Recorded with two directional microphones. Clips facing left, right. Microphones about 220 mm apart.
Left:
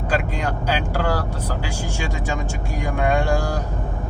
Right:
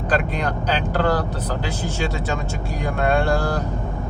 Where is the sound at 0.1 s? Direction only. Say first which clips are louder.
Right 1 dB; 10° left (ahead or behind).